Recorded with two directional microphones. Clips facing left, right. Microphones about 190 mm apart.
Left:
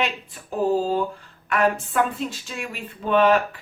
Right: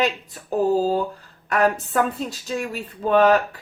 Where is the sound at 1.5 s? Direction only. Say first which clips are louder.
Right 1 dB; 40° right (ahead or behind).